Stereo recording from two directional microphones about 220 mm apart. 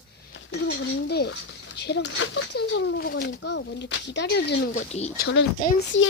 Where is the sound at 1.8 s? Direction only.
50° left (ahead or behind).